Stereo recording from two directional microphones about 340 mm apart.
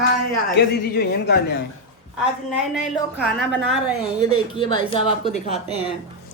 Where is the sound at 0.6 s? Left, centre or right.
Left.